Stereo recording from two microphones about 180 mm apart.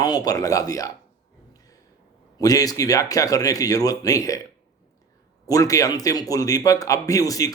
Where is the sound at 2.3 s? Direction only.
20° left (ahead or behind).